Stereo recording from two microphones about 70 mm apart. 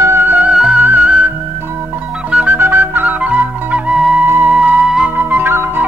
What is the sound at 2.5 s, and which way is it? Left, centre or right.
Flute, right.